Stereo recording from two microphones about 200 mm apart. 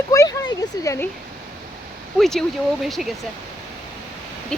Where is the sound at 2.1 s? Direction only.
Centre (ahead or behind).